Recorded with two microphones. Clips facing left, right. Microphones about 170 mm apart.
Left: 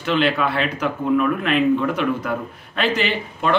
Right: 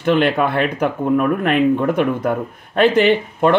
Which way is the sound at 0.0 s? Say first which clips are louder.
Right 4 dB; 50° right (ahead or behind).